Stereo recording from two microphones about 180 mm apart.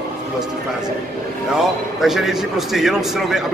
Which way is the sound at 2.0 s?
Centre (ahead or behind).